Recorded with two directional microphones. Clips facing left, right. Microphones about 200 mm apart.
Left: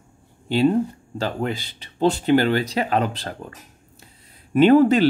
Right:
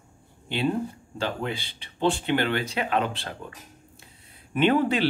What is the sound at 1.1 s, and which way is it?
Speech, 45° left (ahead or behind).